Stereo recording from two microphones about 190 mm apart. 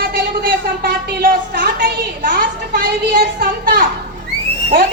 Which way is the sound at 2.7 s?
60° right (ahead or behind).